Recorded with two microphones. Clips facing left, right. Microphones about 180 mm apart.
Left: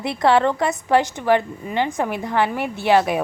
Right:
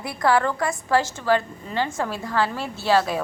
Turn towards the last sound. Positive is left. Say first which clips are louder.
# left 4 dB
turn(degrees=20)  # may be behind; listen again after turning